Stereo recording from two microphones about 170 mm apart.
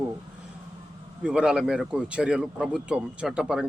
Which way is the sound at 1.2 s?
5° right (ahead or behind).